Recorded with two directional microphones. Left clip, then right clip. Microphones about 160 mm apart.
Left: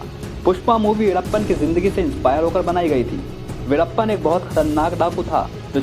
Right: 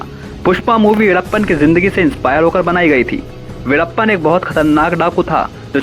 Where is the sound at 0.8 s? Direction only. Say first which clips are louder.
Right 7 dB; 30° right (ahead or behind).